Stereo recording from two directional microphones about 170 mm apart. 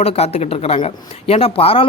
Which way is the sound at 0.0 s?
35° left (ahead or behind).